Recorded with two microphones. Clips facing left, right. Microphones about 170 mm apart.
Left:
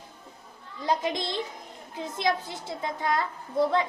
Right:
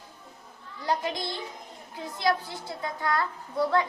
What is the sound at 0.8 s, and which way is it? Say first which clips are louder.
A woman's voice: left 2 dB; 20° left (ahead or behind).